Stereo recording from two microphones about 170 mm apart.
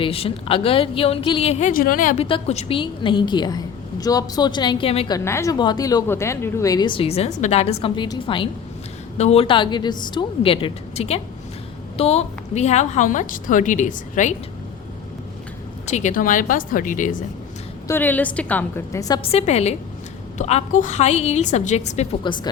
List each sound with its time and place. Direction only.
0.0 s a woman's voice: 35° left (ahead or behind); by 2.1 s 55° left (ahead or behind)
2.1 s a woman's voice: 35° left (ahead or behind)
5.1 s a woman's voice: 15° left (ahead or behind)
9.1 s a woman's voice: 40° left (ahead or behind)
15.9 s a woman's voice: 45° left (ahead or behind)
17.8 s a woman's voice: 10° left (ahead or behind)
19.2 s a woman's voice: 40° left (ahead or behind)
22.3 s a woman's voice: 25° left (ahead or behind)